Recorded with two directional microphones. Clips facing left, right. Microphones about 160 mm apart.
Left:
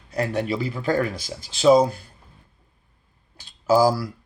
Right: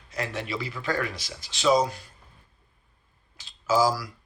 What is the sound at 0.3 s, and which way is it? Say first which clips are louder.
Speech: left 7 dB; 45° left (ahead or behind).